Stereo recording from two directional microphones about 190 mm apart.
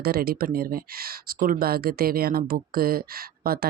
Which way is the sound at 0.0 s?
50° right (ahead or behind).